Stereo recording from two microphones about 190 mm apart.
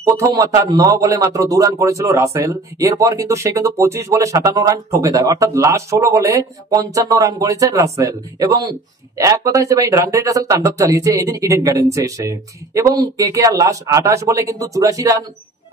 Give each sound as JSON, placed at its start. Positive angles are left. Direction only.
{"t": 0.0, "sound": "a man's voice", "side_deg": -20}